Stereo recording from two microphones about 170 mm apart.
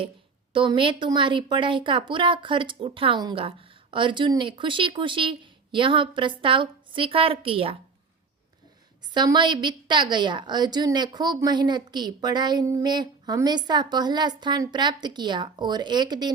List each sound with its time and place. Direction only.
0.5 s a woman's voice: 30° right (ahead or behind)
9.1 s a woman's voice: 25° right (ahead or behind)